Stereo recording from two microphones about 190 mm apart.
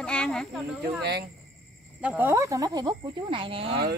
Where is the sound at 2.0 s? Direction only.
10° right (ahead or behind); by 3.7 s 30° right (ahead or behind).